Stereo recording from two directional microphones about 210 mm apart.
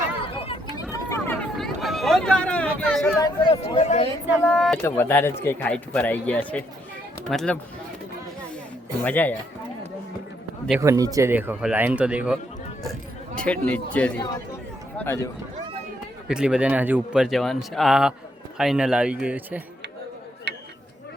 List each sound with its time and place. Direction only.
0.4 s vehicle: 25° left (ahead or behind)
1.1 s a sound: 5° left (ahead or behind)
3.2 s speech: 20° left (ahead or behind)
4.4 s speech: 5° left (ahead or behind)
9.0 s speech: 10° left (ahead or behind)
10.8 s speech: 15° right (ahead or behind)
12.8 s a sound: centre (ahead or behind)
13.7 s speech: 5° left (ahead or behind)
16.3 s speech: 5° right (ahead or behind)
20.5 s a sound: 55° right (ahead or behind)